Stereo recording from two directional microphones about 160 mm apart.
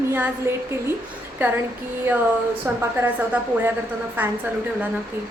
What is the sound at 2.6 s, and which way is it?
Speech, 20° right (ahead or behind).